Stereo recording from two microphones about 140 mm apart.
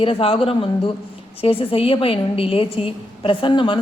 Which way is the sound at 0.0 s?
40° left (ahead or behind).